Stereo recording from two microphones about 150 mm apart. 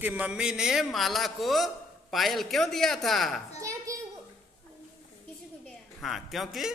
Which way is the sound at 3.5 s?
20° right (ahead or behind).